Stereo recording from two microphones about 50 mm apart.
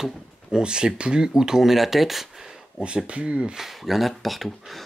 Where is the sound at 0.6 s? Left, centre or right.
Centre.